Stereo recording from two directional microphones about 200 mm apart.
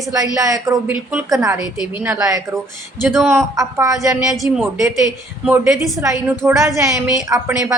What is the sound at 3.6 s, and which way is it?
Speech, 15° right (ahead or behind).